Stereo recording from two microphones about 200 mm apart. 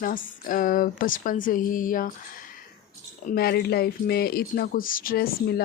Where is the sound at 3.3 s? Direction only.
50° left (ahead or behind).